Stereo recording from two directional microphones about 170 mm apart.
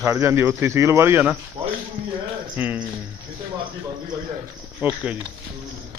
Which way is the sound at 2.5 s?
10° right (ahead or behind).